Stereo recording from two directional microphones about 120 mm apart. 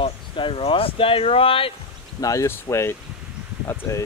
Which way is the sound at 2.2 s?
25° left (ahead or behind).